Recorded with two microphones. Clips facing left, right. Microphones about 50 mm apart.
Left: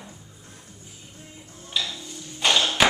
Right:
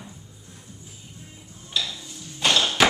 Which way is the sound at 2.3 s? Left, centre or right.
Centre.